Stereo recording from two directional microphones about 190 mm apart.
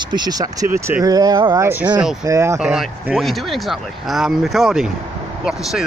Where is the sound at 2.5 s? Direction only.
Centre (ahead or behind).